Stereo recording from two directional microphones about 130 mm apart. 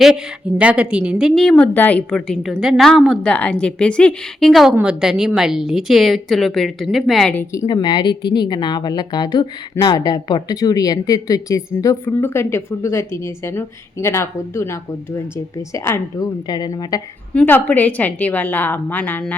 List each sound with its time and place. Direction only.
0.6 s a woman's voice: 10° right (ahead or behind)
1.4 s a woman's voice: 5° left (ahead or behind)
7.3 s speech: 20° left (ahead or behind)
7.7 s a woman's voice: 35° left (ahead or behind)
16.5 s a woman's voice: 35° left (ahead or behind)
17.3 s a woman's voice: 15° left (ahead or behind)